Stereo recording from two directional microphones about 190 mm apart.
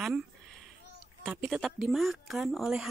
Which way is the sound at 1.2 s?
5° right (ahead or behind).